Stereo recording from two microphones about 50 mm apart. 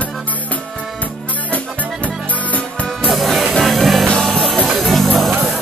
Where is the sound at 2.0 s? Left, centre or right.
Left.